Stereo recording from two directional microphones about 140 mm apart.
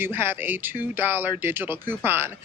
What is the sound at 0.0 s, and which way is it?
Speech, 15° right (ahead or behind).